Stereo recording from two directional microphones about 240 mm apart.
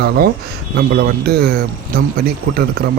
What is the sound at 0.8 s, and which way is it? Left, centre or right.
A man's voice, right.